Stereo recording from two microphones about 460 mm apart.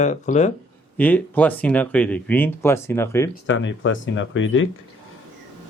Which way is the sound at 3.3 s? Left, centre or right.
Left.